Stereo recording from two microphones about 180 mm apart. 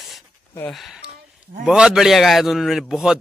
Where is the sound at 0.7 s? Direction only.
Centre (ahead or behind).